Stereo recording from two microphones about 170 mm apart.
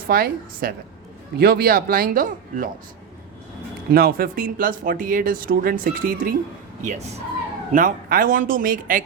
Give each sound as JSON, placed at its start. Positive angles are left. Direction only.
{"t": 0.1, "sound": "speech", "side_deg": -60}
{"t": 3.9, "sound": "speech", "side_deg": -65}
{"t": 6.8, "sound": "speech", "side_deg": -45}